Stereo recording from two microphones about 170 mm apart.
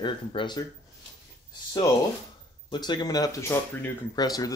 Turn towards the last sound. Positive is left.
turn(degrees=20)  # may be behind; listen again after turning